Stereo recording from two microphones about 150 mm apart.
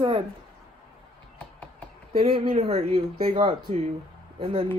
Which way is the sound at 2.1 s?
35° right (ahead or behind).